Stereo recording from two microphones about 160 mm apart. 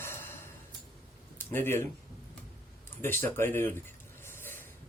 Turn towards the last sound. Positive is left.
turn(degrees=15)  # may be behind; listen again after turning